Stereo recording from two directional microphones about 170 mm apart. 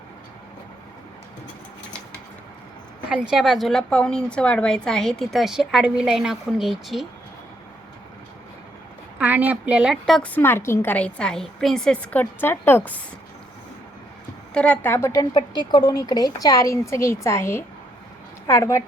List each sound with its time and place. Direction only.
3.1 s a woman's voice: 5° right (ahead or behind)
9.1 s a woman's voice: 10° right (ahead or behind); by 13.0 s 10° left (ahead or behind)
14.5 s a woman's voice: 10° left (ahead or behind)